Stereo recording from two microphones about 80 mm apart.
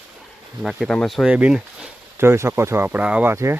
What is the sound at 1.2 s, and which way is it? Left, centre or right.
Speech, centre.